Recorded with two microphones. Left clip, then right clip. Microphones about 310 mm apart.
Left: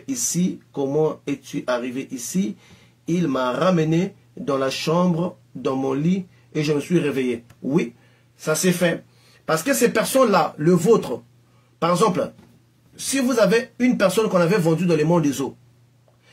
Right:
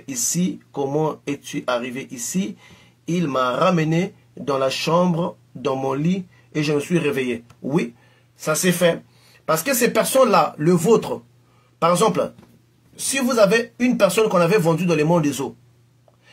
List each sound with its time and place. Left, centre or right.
0.0 s speech: right
13.3 s speech: centre